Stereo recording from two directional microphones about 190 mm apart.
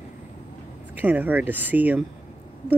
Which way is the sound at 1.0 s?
10° right (ahead or behind).